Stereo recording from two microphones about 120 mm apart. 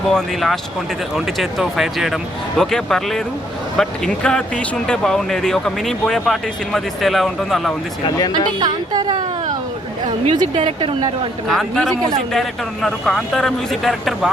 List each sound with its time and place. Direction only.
0.1 s speech: centre (ahead or behind)
8.0 s speech: 35° left (ahead or behind)
8.3 s a woman's voice: 40° right (ahead or behind)
10.2 s a woman's voice: 40° right (ahead or behind)
11.4 s speech: 5° left (ahead or behind)